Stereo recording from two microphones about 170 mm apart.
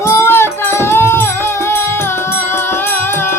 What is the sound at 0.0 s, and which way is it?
Music, 15° left (ahead or behind).